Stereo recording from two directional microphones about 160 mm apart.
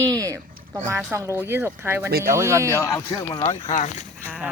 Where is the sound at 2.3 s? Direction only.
15° right (ahead or behind).